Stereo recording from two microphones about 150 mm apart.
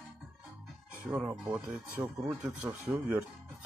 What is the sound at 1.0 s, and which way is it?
Speech, 15° right (ahead or behind).